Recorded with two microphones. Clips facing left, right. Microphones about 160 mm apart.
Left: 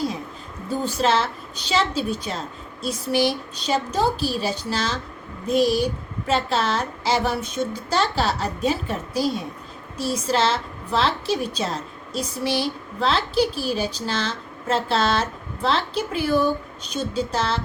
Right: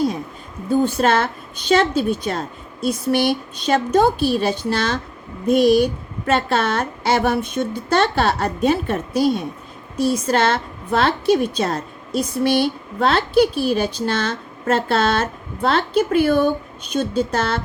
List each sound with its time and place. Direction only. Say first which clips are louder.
0.7 s a woman's voice: right 5 dB; 55° right (ahead or behind)